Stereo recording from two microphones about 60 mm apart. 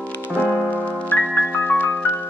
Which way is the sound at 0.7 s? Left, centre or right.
Left.